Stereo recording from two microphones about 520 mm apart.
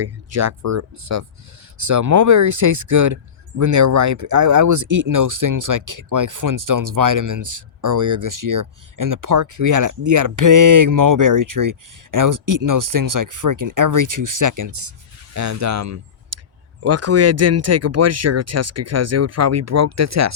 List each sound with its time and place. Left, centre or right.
0.0 s speech: right